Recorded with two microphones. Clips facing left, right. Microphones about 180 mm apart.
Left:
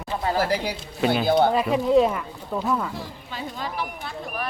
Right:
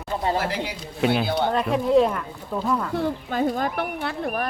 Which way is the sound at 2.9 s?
60° right (ahead or behind).